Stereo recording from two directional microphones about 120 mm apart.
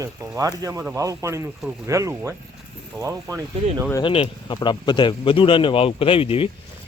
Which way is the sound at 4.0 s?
45° left (ahead or behind).